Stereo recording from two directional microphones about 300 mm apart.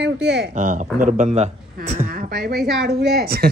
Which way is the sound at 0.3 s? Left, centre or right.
Right.